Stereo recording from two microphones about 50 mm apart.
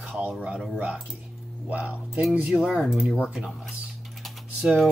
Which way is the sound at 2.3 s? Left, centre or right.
Right.